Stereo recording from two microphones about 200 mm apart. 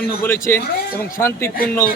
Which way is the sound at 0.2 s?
10° left (ahead or behind).